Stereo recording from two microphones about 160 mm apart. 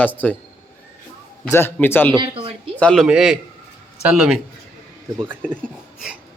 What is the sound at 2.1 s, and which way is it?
Speech, 30° right (ahead or behind).